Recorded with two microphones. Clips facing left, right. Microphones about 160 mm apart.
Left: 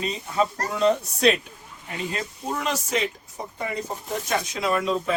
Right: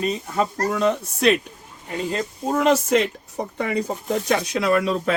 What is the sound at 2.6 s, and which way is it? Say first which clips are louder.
Speech: right 9 dB; 55° right (ahead or behind).